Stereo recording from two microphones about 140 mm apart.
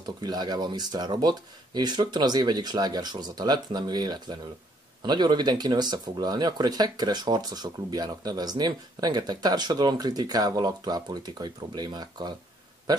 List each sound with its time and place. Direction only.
0.0 s speech: 30° right (ahead or behind)